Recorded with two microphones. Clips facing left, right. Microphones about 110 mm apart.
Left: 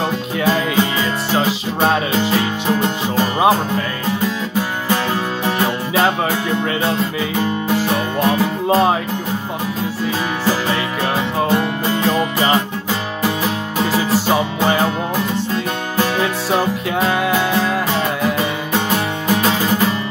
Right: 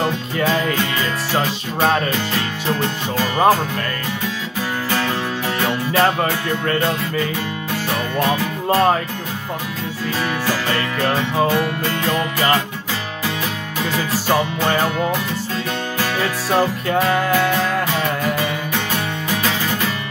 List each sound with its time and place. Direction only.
0.0 s music: 5° left (ahead or behind)
3.2 s music: 15° left (ahead or behind)
5.9 s music: 5° left (ahead or behind)
10.7 s music: 10° left (ahead or behind)
11.5 s music: 20° left (ahead or behind)
14.1 s music: 10° left (ahead or behind)
17.3 s music: 20° left (ahead or behind)